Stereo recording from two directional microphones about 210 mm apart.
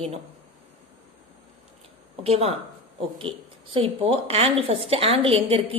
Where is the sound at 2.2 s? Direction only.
30° right (ahead or behind).